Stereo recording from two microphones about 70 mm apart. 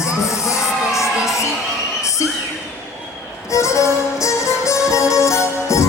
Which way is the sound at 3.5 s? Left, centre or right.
Left.